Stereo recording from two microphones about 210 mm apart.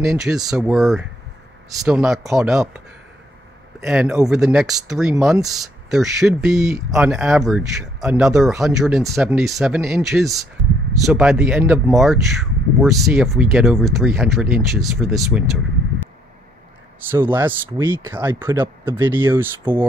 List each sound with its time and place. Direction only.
0.0 s speech: centre (ahead or behind)
3.8 s speech: 5° right (ahead or behind)
17.1 s speech: 10° right (ahead or behind)